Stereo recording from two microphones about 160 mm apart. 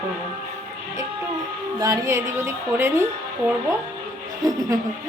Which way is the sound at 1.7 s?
20° right (ahead or behind).